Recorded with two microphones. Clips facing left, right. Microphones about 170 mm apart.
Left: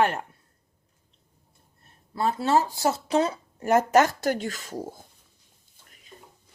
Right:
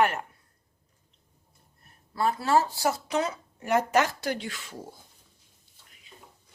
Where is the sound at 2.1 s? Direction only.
25° left (ahead or behind); by 5.0 s 45° left (ahead or behind).